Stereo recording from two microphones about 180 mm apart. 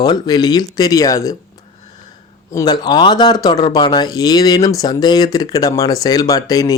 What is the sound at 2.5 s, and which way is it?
Speech, 20° left (ahead or behind).